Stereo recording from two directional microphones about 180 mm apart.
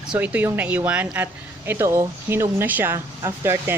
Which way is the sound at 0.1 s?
10° right (ahead or behind).